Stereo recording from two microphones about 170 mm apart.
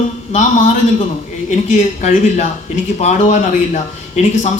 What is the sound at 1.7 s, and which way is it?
A man's voice, 45° left (ahead or behind).